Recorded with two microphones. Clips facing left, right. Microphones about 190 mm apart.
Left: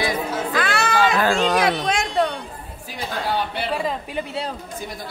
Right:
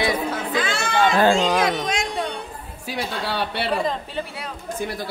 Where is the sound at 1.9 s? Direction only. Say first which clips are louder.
Left 4 dB; 55° left (ahead or behind).